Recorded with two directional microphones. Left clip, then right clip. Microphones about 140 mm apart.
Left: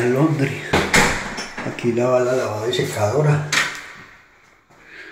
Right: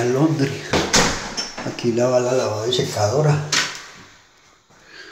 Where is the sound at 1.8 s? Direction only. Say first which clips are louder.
Even; 15° right (ahead or behind).